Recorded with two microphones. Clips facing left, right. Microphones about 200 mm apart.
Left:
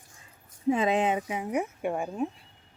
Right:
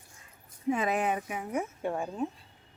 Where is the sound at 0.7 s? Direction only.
25° left (ahead or behind).